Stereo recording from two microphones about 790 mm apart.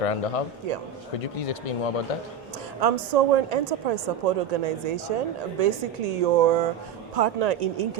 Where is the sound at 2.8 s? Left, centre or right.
Right.